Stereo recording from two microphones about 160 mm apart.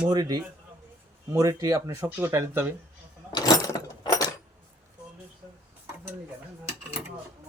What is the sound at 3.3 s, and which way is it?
Keys jangling, 25° left (ahead or behind).